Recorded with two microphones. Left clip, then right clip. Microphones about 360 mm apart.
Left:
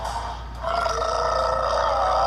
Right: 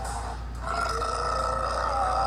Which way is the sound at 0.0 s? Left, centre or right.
Centre.